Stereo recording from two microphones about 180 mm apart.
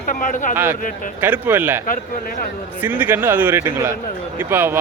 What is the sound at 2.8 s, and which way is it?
A man's voice, 10° right (ahead or behind).